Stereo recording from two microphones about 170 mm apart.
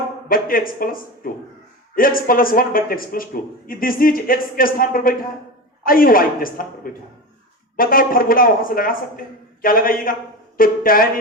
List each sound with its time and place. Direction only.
0.3 s a man's voice: 55° left (ahead or behind)